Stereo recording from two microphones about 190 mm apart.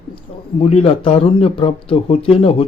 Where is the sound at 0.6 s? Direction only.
30° left (ahead or behind).